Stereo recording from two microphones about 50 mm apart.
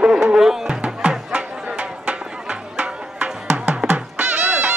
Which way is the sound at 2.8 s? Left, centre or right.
Right.